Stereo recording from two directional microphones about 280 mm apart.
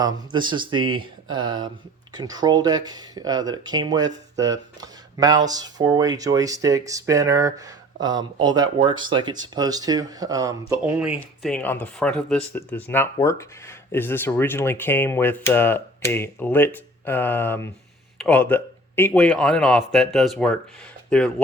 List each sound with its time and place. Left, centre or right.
0.0 s a man's voice: centre